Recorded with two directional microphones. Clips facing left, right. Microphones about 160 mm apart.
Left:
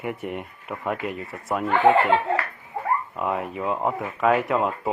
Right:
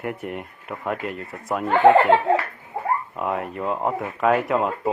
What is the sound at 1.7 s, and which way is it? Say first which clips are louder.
Speech: right 4 dB; 50° right (ahead or behind).